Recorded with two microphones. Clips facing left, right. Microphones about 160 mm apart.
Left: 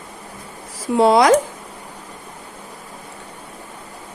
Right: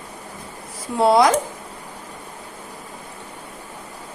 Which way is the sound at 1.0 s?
90° left.